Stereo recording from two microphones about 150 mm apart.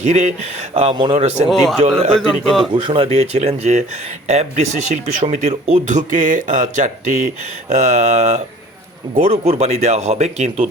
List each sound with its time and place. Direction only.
0.0 s speech: 50° right (ahead or behind)
1.5 s a man's voice: 5° left (ahead or behind)
2.7 s speech: 35° right (ahead or behind)